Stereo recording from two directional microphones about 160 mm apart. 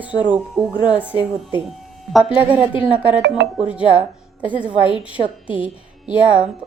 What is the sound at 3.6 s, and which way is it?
A woman's voice, 10° right (ahead or behind).